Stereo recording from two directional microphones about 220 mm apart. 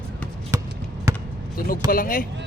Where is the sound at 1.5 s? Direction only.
40° left (ahead or behind).